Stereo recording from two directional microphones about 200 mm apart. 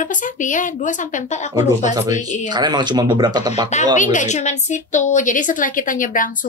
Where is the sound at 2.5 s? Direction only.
20° right (ahead or behind).